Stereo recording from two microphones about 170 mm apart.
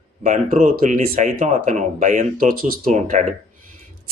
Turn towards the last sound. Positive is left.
turn(degrees=-45)  # may be behind; listen again after turning